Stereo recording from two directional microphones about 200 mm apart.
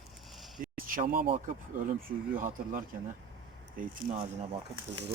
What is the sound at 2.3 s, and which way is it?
Speech, 40° right (ahead or behind).